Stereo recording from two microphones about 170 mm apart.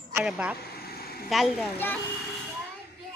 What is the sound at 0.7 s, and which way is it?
Vehicle, 65° left (ahead or behind).